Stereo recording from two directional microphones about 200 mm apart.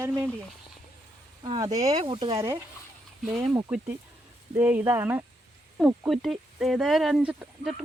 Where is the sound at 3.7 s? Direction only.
10° right (ahead or behind).